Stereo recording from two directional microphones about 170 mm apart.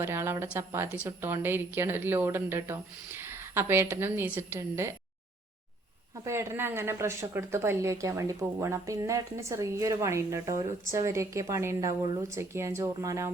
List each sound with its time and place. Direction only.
0.0 s a woman's voice: 15° right (ahead or behind)
6.2 s a woman's voice: 15° right (ahead or behind)